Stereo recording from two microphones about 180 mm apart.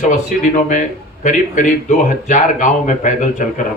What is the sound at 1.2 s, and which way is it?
Speech, 45° left (ahead or behind).